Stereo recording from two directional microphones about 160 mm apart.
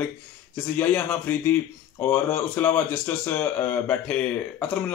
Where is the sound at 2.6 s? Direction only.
15° left (ahead or behind).